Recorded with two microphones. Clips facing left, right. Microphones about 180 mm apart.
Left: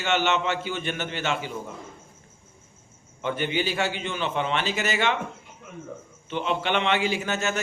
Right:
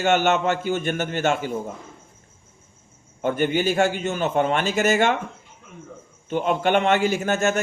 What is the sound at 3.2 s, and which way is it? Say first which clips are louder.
A man's voice: right 5 dB; 45° right (ahead or behind).